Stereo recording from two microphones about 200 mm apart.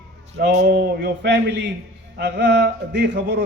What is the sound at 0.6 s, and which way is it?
A man's voice, 50° right (ahead or behind).